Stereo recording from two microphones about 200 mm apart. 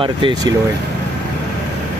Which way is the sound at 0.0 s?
20° right (ahead or behind).